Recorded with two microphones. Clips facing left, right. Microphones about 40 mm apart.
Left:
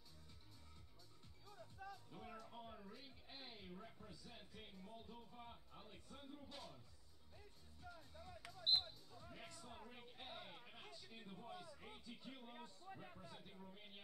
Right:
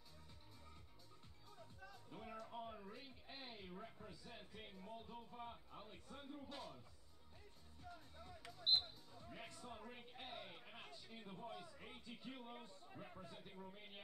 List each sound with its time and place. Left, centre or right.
2.1 s music: centre
2.4 s a sound: centre
8.5 s music: centre
10.7 s a sound: centre
11.4 s a man's voice: centre
12.9 s a man's voice: centre